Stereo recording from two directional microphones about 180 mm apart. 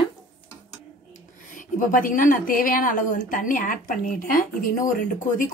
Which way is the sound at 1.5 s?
50° left (ahead or behind).